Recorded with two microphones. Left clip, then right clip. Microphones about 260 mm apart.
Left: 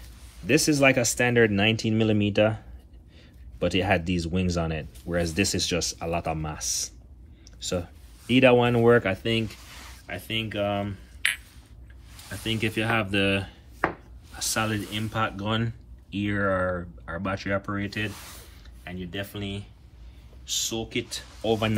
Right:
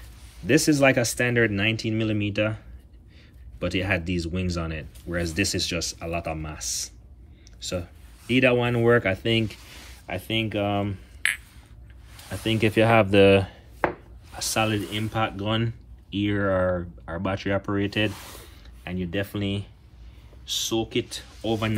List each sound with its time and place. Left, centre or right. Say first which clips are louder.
0.5 s speech: right 1 dB; centre
12.4 s speech: right 6 dB; centre
12.9 s dishes: right 9 dB; centre
14.3 s speech: right 3 dB; centre